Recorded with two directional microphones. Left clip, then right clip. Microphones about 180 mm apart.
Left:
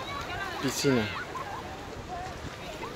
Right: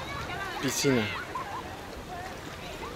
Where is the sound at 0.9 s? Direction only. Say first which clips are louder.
Even; 55° left (ahead or behind).